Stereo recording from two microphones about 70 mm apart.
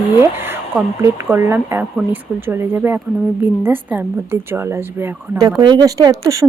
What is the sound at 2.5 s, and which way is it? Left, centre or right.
Speech, right.